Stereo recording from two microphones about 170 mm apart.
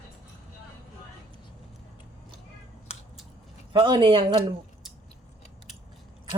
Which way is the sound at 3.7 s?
30° right (ahead or behind).